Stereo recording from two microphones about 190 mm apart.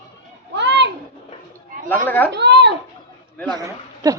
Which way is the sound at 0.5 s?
65° right (ahead or behind).